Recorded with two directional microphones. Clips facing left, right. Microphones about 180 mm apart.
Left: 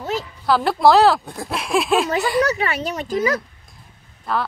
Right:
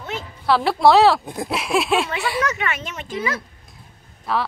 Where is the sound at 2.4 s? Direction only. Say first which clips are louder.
Left 4 dB; 35° left (ahead or behind).